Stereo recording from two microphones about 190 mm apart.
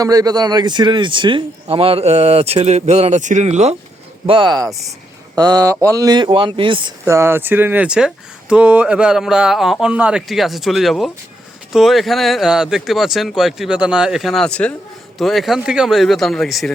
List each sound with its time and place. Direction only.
0.0 s speech: 20° right (ahead or behind); by 3.8 s 35° right (ahead or behind)
4.3 s speech: 25° right (ahead or behind)
7.0 s speech: 15° right (ahead or behind)